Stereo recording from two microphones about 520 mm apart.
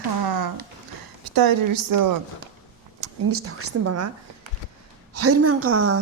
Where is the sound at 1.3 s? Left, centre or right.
Right.